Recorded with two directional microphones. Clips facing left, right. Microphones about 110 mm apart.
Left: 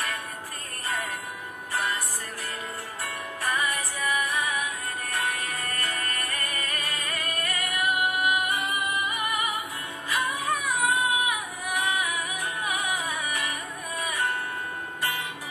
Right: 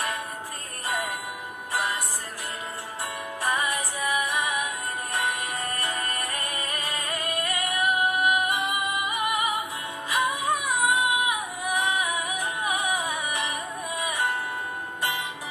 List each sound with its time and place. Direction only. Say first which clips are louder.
3.4 s music: right 1 dB; 20° right (ahead or behind)